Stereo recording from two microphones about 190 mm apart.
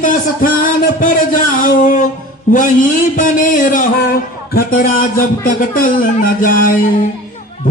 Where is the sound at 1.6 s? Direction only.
45° left (ahead or behind).